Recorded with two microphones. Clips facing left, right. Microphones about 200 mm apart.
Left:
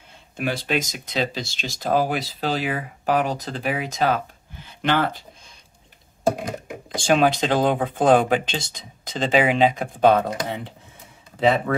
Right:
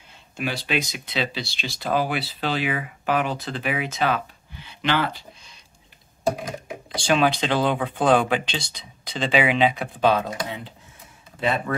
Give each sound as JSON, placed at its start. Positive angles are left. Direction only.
{"t": 0.4, "sound": "speech", "side_deg": 50}
{"t": 7.0, "sound": "speech", "side_deg": 45}